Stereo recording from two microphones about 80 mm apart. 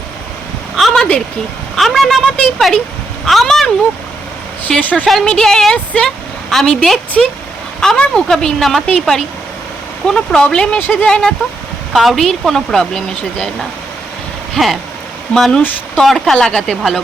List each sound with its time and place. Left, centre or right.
0.8 s a woman's voice: centre
4.8 s a woman's voice: left
5.0 s a woman's voice: centre
14.5 s a sound: centre
15.3 s speech: centre